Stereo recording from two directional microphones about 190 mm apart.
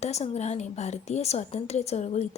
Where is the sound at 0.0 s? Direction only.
35° left (ahead or behind).